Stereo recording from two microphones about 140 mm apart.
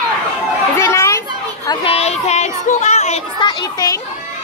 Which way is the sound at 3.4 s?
30° left (ahead or behind).